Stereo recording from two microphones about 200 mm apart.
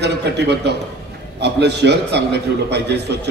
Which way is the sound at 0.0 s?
55° right (ahead or behind).